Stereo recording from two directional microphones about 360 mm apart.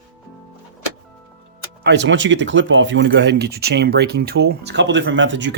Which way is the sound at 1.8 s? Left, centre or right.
Right.